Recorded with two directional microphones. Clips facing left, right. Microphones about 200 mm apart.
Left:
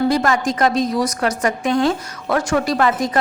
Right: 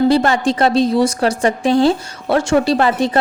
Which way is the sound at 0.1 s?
30° right (ahead or behind).